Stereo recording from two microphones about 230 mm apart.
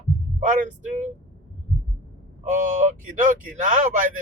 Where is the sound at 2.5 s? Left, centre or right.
Right.